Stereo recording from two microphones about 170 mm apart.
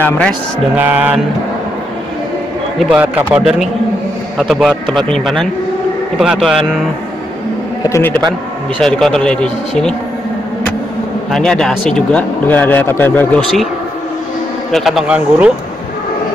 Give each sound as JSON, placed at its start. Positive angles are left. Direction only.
{"t": 0.0, "sound": "speech", "side_deg": 5}
{"t": 0.7, "sound": "speech", "side_deg": -10}
{"t": 2.8, "sound": "speech", "side_deg": -5}
{"t": 4.4, "sound": "speech", "side_deg": 0}
{"t": 7.9, "sound": "speech", "side_deg": 10}
{"t": 8.2, "sound": "a man's voice", "side_deg": -25}
{"t": 8.8, "sound": "speech", "side_deg": 0}
{"t": 11.3, "sound": "speech", "side_deg": 5}
{"t": 14.7, "sound": "speech", "side_deg": 0}